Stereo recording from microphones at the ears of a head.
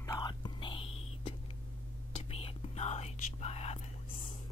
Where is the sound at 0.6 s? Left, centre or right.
Left.